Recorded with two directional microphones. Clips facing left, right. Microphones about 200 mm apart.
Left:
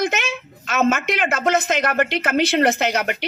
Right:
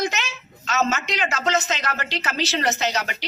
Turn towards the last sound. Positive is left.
turn(degrees=55)  # may be behind; listen again after turning